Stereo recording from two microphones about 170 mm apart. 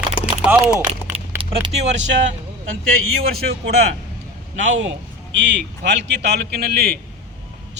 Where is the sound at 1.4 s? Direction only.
30° right (ahead or behind).